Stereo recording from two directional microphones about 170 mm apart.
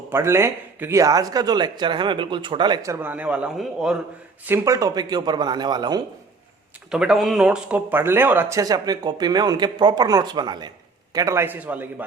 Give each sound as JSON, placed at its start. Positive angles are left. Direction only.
{"t": 0.1, "sound": "speech", "side_deg": -15}
{"t": 4.4, "sound": "speech", "side_deg": -15}
{"t": 6.9, "sound": "a man's voice", "side_deg": -5}